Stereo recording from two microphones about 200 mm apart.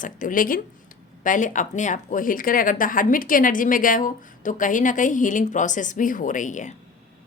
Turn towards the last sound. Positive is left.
turn(degrees=40)  # may be behind; listen again after turning